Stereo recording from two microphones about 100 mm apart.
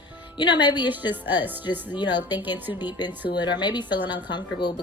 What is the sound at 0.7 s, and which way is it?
Speech, 20° right (ahead or behind).